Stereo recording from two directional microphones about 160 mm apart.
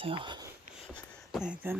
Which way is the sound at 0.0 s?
35° right (ahead or behind).